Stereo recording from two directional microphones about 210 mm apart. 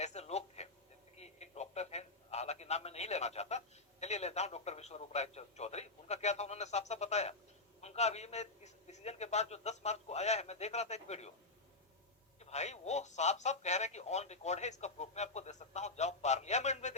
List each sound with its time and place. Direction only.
0.0 s a sound: 30° left (ahead or behind)
4.0 s speech: 30° left (ahead or behind)
12.4 s speech: 30° left (ahead or behind)